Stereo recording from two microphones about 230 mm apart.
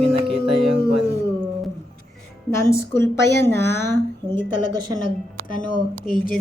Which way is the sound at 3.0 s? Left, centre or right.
Centre.